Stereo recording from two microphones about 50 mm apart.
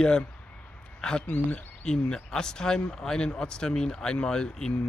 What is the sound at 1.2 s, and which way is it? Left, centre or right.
Speech, left.